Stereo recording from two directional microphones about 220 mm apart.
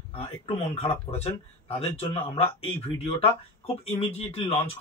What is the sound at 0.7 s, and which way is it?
Speech, 25° left (ahead or behind).